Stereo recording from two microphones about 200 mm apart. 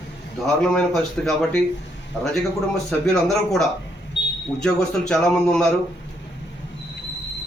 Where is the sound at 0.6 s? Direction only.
5° left (ahead or behind).